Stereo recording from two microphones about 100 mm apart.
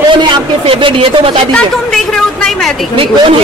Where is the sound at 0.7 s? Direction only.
60° right (ahead or behind).